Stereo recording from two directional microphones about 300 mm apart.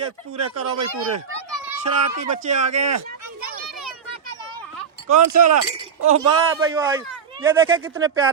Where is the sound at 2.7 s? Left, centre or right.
Right.